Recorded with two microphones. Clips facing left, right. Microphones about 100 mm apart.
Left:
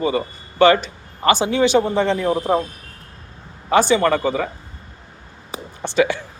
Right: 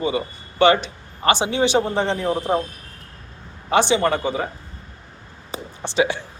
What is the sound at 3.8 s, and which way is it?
Speech, 50° left (ahead or behind).